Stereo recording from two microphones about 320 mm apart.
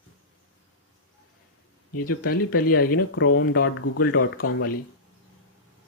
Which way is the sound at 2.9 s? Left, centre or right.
Left.